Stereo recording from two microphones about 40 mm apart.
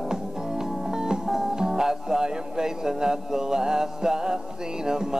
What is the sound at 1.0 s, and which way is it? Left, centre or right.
Speech, centre.